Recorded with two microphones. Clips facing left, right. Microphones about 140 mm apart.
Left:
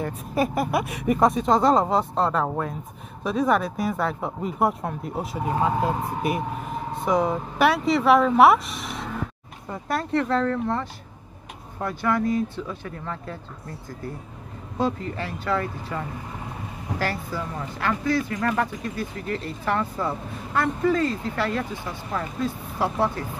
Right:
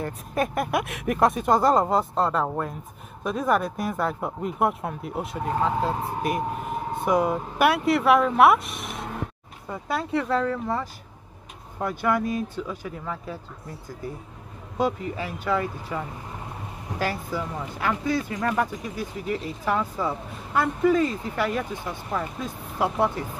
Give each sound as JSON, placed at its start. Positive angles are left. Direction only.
{"t": 0.0, "sound": "speech", "side_deg": 5}
{"t": 7.1, "sound": "speech", "side_deg": -5}
{"t": 14.8, "sound": "speech", "side_deg": -15}